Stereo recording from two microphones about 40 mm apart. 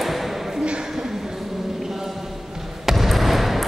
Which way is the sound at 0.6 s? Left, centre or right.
Right.